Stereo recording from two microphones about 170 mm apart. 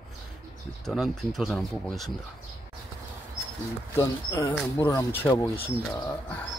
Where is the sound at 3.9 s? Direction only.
15° left (ahead or behind).